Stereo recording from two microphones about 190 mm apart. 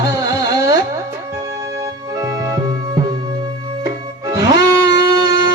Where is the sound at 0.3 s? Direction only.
20° right (ahead or behind).